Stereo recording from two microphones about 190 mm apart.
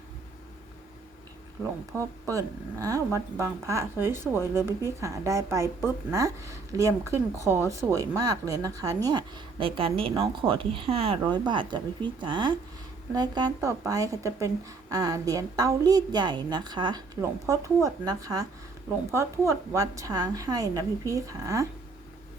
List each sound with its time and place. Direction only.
1.9 s a woman's voice: 15° right (ahead or behind)